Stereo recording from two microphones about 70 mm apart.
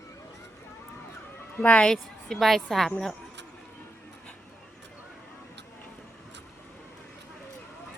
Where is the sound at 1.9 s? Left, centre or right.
Centre.